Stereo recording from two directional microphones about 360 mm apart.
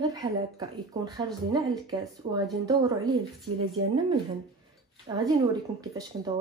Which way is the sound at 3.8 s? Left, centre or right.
Right.